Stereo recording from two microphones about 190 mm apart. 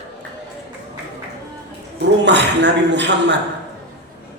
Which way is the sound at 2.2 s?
65° right (ahead or behind).